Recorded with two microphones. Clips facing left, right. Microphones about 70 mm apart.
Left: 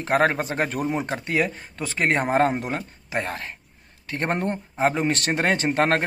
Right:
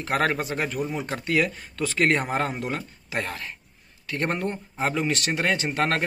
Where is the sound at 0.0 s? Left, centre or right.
Left.